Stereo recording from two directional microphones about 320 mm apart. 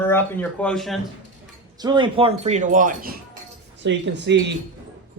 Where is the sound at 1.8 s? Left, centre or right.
Centre.